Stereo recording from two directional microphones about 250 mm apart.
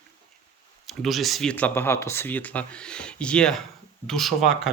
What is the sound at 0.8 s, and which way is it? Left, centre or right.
Speech, centre.